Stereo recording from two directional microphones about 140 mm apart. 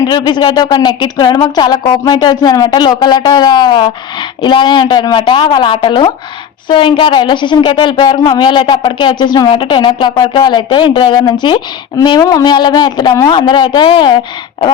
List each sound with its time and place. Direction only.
0.0 s a woman's voice: 30° left (ahead or behind)